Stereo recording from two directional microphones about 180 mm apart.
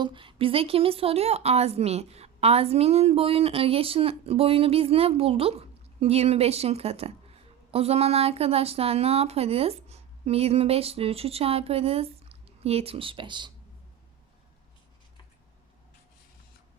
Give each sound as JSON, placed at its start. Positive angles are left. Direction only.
{"t": 0.0, "sound": "a woman's voice", "side_deg": -30}